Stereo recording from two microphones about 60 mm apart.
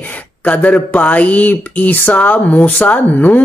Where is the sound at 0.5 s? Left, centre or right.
Left.